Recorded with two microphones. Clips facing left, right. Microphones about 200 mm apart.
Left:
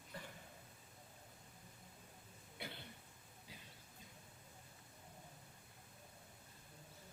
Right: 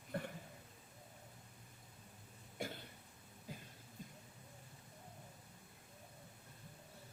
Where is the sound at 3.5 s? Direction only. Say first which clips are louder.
Right 9 dB; 50° right (ahead or behind).